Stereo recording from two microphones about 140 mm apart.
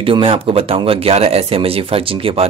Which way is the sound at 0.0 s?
40° right (ahead or behind).